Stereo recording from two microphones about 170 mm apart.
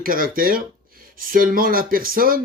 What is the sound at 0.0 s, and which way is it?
Speech, 55° right (ahead or behind).